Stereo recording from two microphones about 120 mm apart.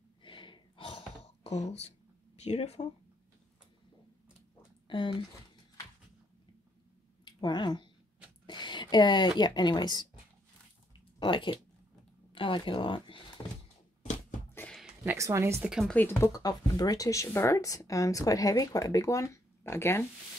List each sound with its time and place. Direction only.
0.2 s gasp: 45° left (ahead or behind); by 1.9 s 70° left (ahead or behind)
2.3 s speech: 65° left (ahead or behind)
4.8 s speech: 45° left (ahead or behind)
7.2 s speech: 40° left (ahead or behind)
8.5 s a sound: 40° left (ahead or behind)
9.4 s speech: 35° left (ahead or behind)
11.1 s speech: 40° left (ahead or behind)
13.4 s thunk: 30° left (ahead or behind)
15.0 s speech: 25° right (ahead or behind)
15.8 s speech: 15° left (ahead or behind)
16.3 s speech: 30° left (ahead or behind)